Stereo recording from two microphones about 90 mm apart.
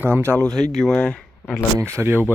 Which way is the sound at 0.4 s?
5° left (ahead or behind).